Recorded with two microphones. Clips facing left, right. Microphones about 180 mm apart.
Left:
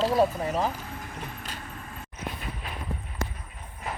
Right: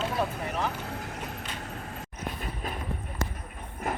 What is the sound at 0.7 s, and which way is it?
Clip-clop, 70° right (ahead or behind).